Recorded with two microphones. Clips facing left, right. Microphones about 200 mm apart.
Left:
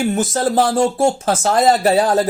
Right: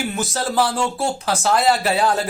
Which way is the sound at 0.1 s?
45° left (ahead or behind).